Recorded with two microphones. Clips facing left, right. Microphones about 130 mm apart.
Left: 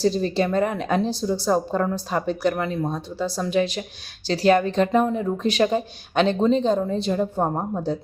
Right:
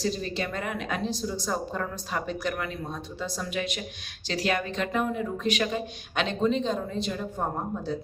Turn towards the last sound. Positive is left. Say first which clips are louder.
# left 6 dB
turn(degrees=40)  # may be behind; listen again after turning